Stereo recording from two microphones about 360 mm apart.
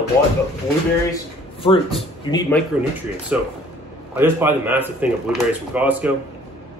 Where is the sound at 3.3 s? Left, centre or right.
Centre.